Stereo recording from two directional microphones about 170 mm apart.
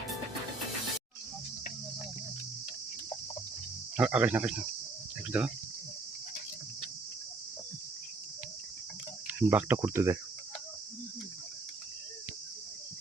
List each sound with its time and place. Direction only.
3.9 s speech: 5° right (ahead or behind)
9.2 s speech: 10° right (ahead or behind)